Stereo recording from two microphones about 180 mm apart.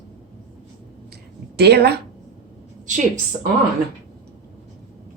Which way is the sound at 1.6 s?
65° right (ahead or behind).